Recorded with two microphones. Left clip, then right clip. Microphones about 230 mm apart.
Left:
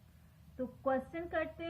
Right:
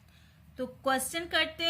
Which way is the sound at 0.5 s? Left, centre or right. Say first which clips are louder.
Right 5 dB; right.